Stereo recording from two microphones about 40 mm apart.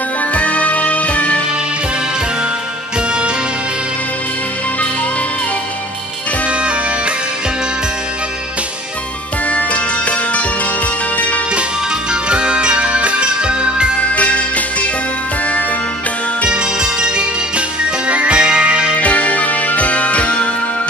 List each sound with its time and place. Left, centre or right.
0.3 s music: left
9.5 s music: left
12.1 s music: right
14.1 s music: left
16.4 s music: right
18.9 s music: left